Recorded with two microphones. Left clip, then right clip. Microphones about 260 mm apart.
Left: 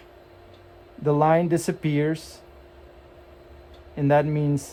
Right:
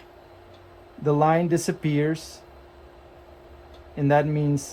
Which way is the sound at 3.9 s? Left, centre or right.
Left.